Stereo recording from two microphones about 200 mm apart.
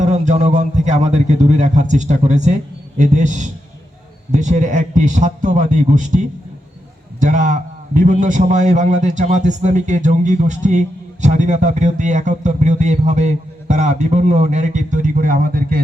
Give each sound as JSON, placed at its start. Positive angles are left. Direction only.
{"t": 0.0, "sound": "a man's voice", "side_deg": -35}